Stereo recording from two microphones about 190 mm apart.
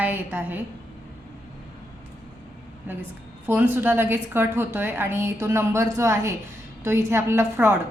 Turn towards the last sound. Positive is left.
turn(degrees=-15)  # may be behind; listen again after turning